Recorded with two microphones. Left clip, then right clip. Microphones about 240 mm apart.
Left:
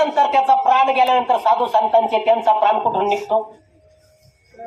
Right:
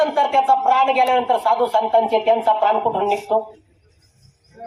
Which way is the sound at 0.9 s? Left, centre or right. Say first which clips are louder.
Left 1 dB; left.